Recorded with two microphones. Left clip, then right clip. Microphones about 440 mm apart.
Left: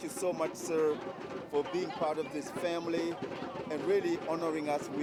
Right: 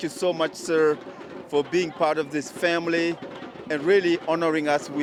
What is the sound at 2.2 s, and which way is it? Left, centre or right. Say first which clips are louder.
Speech: right 10 dB; right.